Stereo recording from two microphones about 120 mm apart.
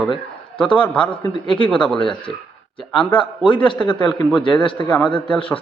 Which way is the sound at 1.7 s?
5° left (ahead or behind).